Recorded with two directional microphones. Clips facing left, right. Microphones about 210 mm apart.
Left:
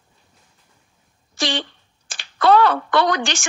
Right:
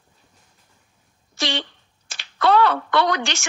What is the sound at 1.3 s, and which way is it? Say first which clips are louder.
A woman's voice: left 2 dB; 45° left (ahead or behind).